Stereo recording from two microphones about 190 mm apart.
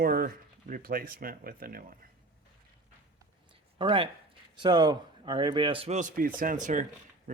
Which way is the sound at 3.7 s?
25° right (ahead or behind).